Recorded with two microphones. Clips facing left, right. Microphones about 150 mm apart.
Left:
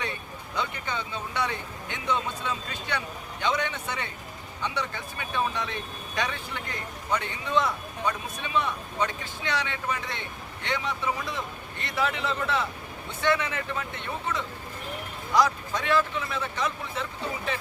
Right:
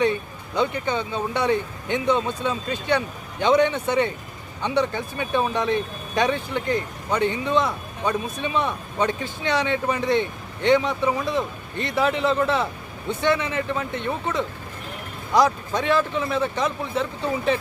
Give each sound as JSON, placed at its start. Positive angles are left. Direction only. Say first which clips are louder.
{"t": 0.5, "sound": "speech", "louder": "right 9 dB", "side_deg": -25}